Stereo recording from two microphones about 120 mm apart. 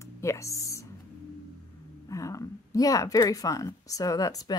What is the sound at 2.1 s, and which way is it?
A woman's voice, 25° left (ahead or behind).